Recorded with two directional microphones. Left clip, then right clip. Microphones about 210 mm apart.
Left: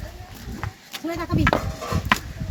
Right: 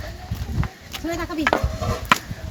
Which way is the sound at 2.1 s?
30° right (ahead or behind).